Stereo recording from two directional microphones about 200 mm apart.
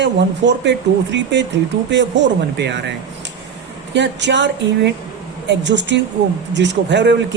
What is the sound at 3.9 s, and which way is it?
Speech, 60° right (ahead or behind).